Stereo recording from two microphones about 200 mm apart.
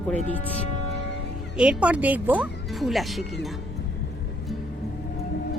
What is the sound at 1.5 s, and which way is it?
Speech, 5° right (ahead or behind).